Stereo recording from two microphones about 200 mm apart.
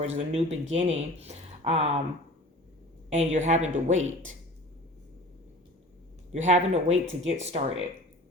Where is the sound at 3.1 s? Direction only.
35° right (ahead or behind).